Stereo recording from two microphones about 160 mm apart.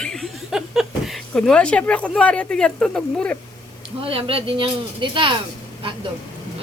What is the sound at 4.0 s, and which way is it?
Speech, 35° right (ahead or behind).